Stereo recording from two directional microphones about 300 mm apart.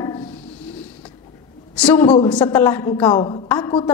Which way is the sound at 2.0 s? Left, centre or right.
Centre.